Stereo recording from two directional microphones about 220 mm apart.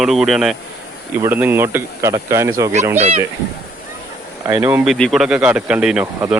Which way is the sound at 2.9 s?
30° right (ahead or behind).